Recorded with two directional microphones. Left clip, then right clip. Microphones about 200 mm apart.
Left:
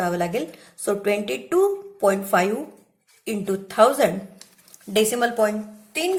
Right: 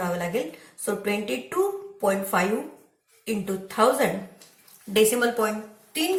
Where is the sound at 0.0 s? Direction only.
50° left (ahead or behind).